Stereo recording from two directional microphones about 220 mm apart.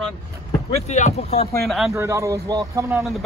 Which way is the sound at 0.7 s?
30° left (ahead or behind).